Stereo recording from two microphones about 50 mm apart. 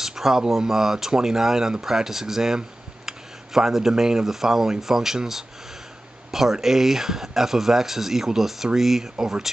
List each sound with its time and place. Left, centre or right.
0.0 s speech: centre